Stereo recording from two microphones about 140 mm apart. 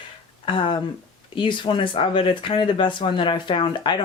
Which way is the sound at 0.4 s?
35° left (ahead or behind).